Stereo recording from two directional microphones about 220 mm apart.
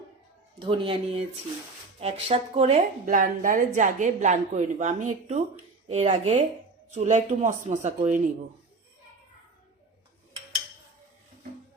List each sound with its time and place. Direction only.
0.6 s a woman's voice: 25° right (ahead or behind)